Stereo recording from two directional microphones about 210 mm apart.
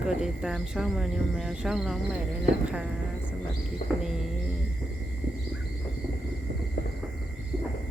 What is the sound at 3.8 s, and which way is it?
Bird, 40° left (ahead or behind).